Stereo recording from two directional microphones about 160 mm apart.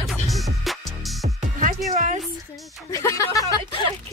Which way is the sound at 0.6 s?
Centre (ahead or behind).